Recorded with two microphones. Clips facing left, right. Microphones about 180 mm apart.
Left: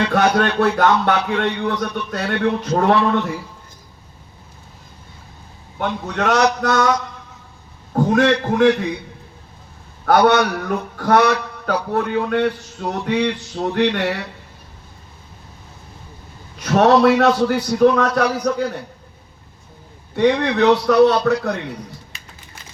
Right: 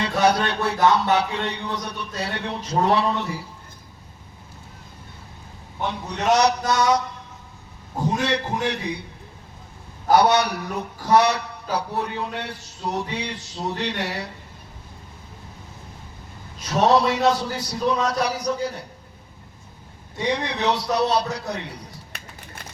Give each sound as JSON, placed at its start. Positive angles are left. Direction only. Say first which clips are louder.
{"t": 0.1, "sound": "speech", "louder": "left 4 dB", "side_deg": 75}
{"t": 5.8, "sound": "speech", "louder": "left 4 dB", "side_deg": 70}
{"t": 7.9, "sound": "speech", "louder": "left 8 dB", "side_deg": 70}
{"t": 10.1, "sound": "speech", "louder": "left 3 dB", "side_deg": 65}
{"t": 11.6, "sound": "a man's voice", "louder": "left 4 dB", "side_deg": 80}
{"t": 13.1, "sound": "a sound", "louder": "left 11 dB", "side_deg": 85}
{"t": 16.6, "sound": "speech", "louder": "left 5 dB", "side_deg": 70}
{"t": 20.1, "sound": "a man's voice", "louder": "left 9 dB", "side_deg": 70}